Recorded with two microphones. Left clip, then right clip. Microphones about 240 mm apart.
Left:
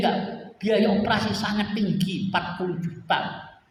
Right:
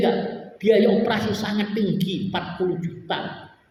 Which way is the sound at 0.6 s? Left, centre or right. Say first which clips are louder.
Right 5 dB; left.